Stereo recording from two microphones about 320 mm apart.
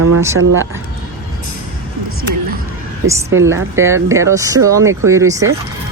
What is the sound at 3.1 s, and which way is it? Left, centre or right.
A woman's voice, centre.